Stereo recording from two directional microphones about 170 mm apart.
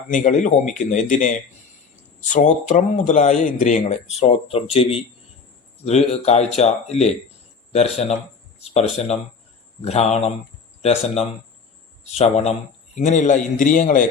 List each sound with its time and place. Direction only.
0.1 s speech: 50° left (ahead or behind)